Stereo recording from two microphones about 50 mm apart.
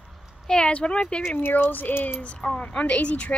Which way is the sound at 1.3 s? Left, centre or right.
Left.